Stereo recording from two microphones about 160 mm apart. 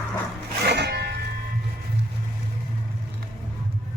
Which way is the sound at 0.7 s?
90° right.